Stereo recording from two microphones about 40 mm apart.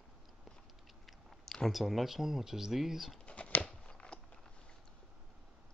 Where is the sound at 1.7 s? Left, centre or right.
Centre.